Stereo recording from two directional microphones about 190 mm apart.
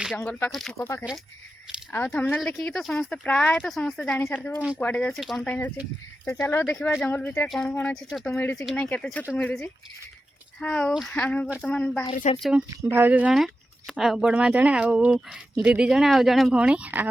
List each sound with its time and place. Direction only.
0.2 s speech: 10° left (ahead or behind)
0.8 s speech: 15° left (ahead or behind)
12.1 s speech: 40° left (ahead or behind)
12.4 s speech: 5° right (ahead or behind)